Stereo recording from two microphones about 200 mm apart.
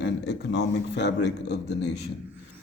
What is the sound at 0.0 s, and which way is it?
A man's voice, 60° left (ahead or behind).